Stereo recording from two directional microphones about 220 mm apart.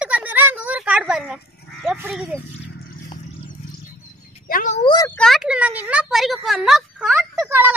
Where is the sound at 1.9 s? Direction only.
5° right (ahead or behind).